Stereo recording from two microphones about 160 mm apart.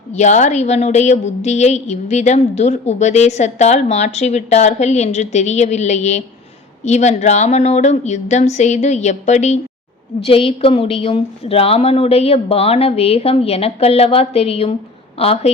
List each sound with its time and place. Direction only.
0.1 s a woman's voice: 45° left (ahead or behind)